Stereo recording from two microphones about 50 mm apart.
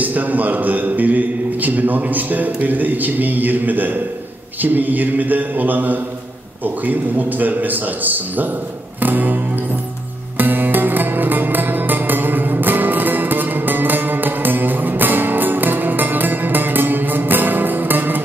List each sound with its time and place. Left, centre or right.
0.0 s a man's voice: right
9.0 s music: right